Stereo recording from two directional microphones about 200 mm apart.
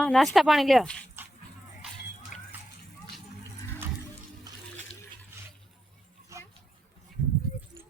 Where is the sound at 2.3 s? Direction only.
40° left (ahead or behind).